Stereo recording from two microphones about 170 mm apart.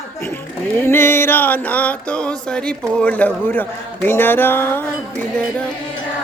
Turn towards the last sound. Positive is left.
turn(degrees=10)  # may be behind; listen again after turning